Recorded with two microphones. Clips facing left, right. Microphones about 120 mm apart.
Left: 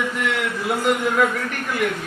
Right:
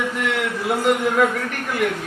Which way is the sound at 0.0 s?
45° right (ahead or behind).